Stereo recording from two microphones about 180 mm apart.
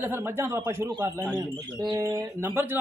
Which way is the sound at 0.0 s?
10° right (ahead or behind).